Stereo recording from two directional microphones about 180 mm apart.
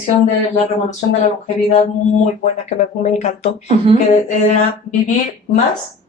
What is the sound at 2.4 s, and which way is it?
Speech, 40° left (ahead or behind).